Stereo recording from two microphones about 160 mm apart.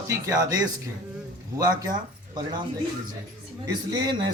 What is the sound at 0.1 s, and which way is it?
Speech, 20° right (ahead or behind).